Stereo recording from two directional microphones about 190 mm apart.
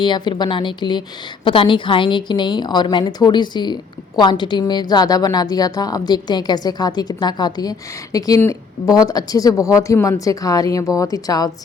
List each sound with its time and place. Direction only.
0.0 s a woman's voice: 25° left (ahead or behind)